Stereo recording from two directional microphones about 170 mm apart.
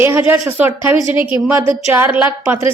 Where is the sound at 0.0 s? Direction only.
15° right (ahead or behind).